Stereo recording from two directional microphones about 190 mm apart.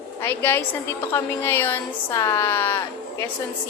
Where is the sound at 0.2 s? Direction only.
10° left (ahead or behind).